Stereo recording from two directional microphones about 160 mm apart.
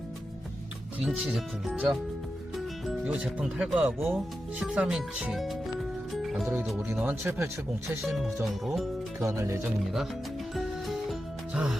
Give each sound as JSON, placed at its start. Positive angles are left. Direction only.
{"t": 0.9, "sound": "speech", "side_deg": -5}
{"t": 6.2, "sound": "music", "side_deg": 0}
{"t": 7.0, "sound": "speech", "side_deg": -15}
{"t": 8.4, "sound": "speech", "side_deg": 0}
{"t": 9.2, "sound": "speech", "side_deg": -20}
{"t": 10.5, "sound": "music", "side_deg": 0}